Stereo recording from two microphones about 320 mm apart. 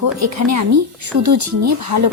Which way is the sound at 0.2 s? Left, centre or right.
Right.